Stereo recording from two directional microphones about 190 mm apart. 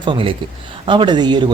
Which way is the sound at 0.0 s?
25° right (ahead or behind).